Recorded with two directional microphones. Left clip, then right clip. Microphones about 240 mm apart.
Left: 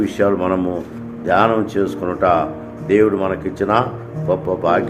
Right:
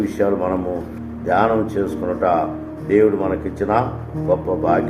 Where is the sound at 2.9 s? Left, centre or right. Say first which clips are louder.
Left 1 dB; left.